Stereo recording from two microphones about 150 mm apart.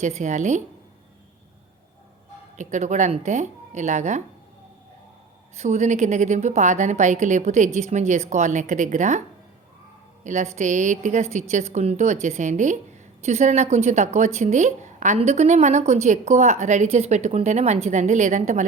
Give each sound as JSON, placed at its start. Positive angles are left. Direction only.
{"t": 0.0, "sound": "a woman's voice", "side_deg": -50}
{"t": 2.6, "sound": "a woman's voice", "side_deg": -55}
{"t": 5.5, "sound": "a woman's voice", "side_deg": -50}
{"t": 10.2, "sound": "a woman's voice", "side_deg": -50}